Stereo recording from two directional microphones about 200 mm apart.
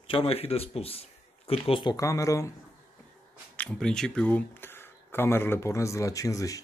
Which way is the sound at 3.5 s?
5° left (ahead or behind).